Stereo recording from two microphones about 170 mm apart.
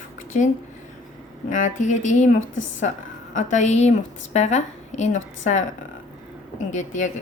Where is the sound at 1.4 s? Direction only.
50° left (ahead or behind).